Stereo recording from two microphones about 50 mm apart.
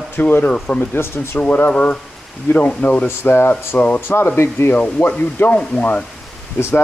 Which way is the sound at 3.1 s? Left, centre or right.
Left.